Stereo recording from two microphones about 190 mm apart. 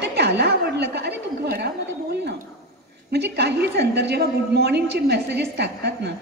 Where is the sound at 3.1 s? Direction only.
60° right (ahead or behind).